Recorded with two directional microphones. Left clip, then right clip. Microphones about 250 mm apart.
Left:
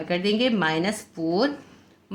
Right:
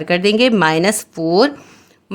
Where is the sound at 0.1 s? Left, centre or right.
Right.